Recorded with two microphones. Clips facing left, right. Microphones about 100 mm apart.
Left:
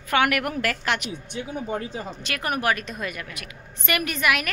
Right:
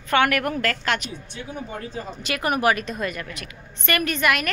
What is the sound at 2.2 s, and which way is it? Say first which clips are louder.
A woman's voice: right 5 dB; 5° right (ahead or behind).